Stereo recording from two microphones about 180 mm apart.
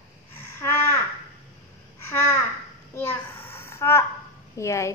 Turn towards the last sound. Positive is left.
turn(degrees=15)  # may be behind; listen again after turning